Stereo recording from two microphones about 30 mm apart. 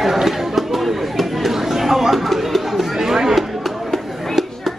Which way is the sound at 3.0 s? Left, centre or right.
Centre.